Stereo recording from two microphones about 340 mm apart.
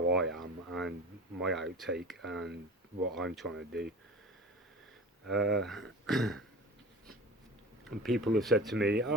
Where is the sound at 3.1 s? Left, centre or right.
Centre.